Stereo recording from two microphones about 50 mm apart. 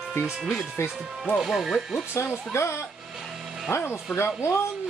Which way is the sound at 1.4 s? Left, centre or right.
Centre.